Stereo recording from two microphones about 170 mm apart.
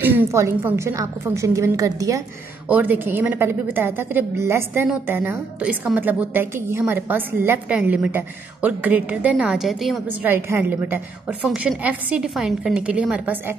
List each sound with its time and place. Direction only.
0.0 s a woman's voice: 15° right (ahead or behind)
10.2 s a woman's voice: 10° right (ahead or behind)